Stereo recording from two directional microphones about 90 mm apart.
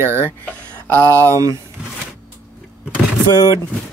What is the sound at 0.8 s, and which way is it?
Speech, 20° left (ahead or behind).